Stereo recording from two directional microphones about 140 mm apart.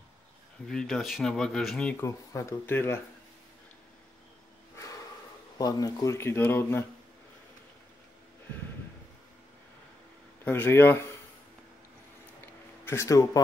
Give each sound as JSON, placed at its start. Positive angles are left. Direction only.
{"t": 0.7, "sound": "speech", "side_deg": 5}
{"t": 2.0, "sound": "speech", "side_deg": 20}
{"t": 4.7, "sound": "a sound", "side_deg": 25}
{"t": 5.6, "sound": "speech", "side_deg": 25}
{"t": 10.4, "sound": "speech", "side_deg": 15}
{"t": 12.8, "sound": "speech", "side_deg": 20}